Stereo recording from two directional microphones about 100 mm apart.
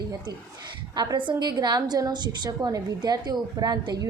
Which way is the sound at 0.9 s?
50° right (ahead or behind).